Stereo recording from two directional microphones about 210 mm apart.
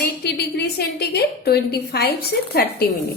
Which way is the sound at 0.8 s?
50° left (ahead or behind).